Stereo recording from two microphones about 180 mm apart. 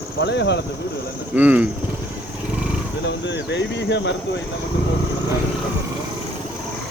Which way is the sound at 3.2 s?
75° left (ahead or behind).